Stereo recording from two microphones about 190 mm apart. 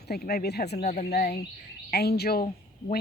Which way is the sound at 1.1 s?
55° left (ahead or behind).